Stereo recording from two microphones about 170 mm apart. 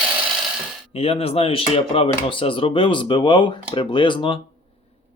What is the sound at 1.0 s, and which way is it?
Speech, 35° left (ahead or behind).